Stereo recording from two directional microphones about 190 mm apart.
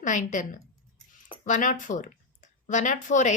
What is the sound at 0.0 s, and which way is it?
A woman's voice, 40° left (ahead or behind).